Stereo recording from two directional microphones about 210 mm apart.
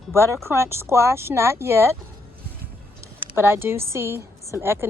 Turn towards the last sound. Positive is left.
turn(degrees=-10)  # may be behind; listen again after turning